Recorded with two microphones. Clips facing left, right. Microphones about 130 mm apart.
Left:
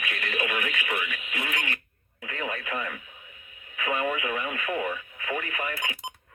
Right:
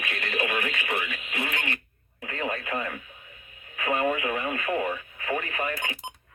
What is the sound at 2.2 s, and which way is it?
Radio, 35° right (ahead or behind).